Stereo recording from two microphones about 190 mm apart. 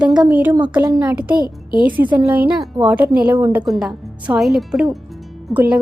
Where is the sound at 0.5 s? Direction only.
25° right (ahead or behind).